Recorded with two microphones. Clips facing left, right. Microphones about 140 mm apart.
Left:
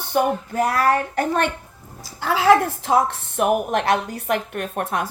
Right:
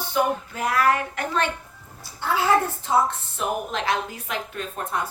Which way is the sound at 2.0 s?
90° left.